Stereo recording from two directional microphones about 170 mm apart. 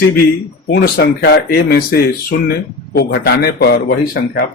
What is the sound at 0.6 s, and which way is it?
Speech, 65° left (ahead or behind).